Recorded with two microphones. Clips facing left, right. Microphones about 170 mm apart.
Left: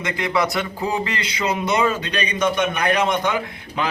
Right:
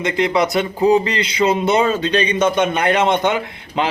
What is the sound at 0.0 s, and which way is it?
A man's voice, 20° right (ahead or behind).